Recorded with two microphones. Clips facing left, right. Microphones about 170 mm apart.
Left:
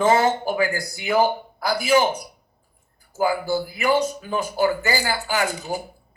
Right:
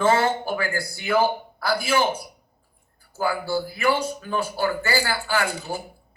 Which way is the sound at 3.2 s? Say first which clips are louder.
Left 3 dB; 15° left (ahead or behind).